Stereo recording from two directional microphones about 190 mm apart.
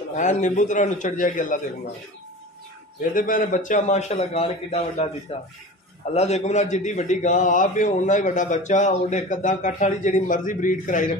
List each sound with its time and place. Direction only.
0.1 s a man's voice: 40° left (ahead or behind)
3.1 s a man's voice: 45° left (ahead or behind)
6.1 s a man's voice: 35° left (ahead or behind)